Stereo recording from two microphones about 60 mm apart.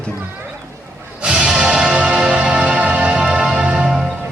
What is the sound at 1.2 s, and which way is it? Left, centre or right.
Music, centre.